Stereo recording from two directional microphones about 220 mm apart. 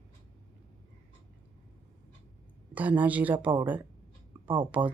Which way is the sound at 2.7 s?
5° right (ahead or behind).